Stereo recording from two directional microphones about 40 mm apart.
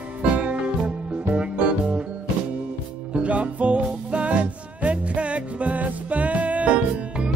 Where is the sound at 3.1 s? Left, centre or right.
Right.